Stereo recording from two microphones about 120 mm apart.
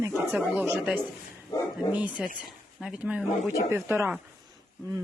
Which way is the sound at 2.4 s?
5° right (ahead or behind).